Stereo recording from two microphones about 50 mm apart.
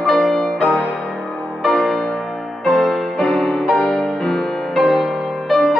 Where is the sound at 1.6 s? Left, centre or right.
Centre.